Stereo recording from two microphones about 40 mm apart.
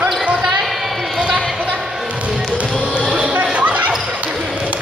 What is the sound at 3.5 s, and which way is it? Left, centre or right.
Basketball bounce, right.